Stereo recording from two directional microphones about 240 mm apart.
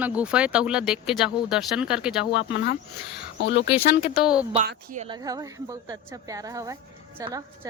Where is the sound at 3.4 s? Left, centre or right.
Left.